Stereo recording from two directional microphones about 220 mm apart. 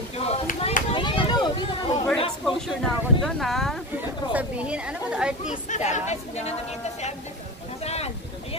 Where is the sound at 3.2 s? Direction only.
Centre (ahead or behind).